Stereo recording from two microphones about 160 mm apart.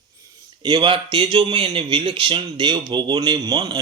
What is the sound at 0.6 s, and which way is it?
Speech, 30° right (ahead or behind).